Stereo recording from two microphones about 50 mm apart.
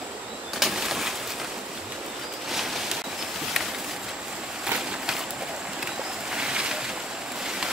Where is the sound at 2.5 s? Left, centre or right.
Centre.